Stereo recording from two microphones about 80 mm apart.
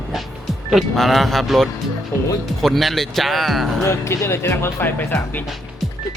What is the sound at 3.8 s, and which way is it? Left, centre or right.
Speech, left.